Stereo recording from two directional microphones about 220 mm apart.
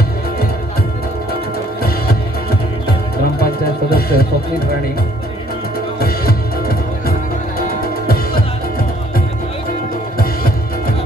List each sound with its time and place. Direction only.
3.9 s music: 45° left (ahead or behind)
5.9 s music: 45° left (ahead or behind)